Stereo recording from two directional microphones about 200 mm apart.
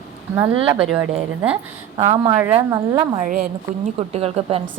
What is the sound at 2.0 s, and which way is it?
A woman's voice, 30° right (ahead or behind).